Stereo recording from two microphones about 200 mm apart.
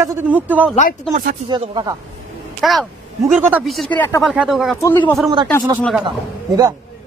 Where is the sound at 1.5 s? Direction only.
25° right (ahead or behind).